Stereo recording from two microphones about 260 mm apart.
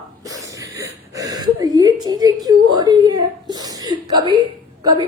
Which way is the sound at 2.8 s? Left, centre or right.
Centre.